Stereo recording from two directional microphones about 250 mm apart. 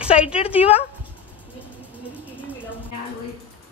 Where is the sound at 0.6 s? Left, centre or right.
Left.